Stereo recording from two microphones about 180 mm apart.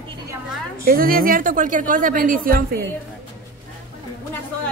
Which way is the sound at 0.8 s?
55° right (ahead or behind).